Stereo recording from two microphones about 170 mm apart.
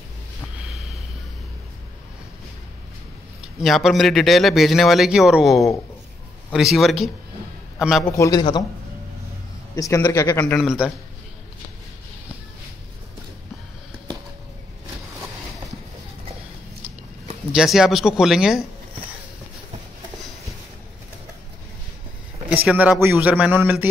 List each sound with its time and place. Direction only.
0.6 s snort: centre (ahead or behind)
3.6 s a man's voice: centre (ahead or behind)
8.1 s a man's voice: 20° left (ahead or behind)
8.4 s a man's voice: 30° left (ahead or behind)
9.8 s a man's voice: 20° left (ahead or behind)
10.6 s a man's voice: 5° right (ahead or behind)
17.5 s a man's voice: 5° right (ahead or behind)
22.7 s a man's voice: 5° right (ahead or behind)